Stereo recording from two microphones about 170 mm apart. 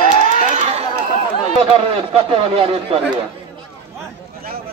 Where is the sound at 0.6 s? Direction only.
40° right (ahead or behind).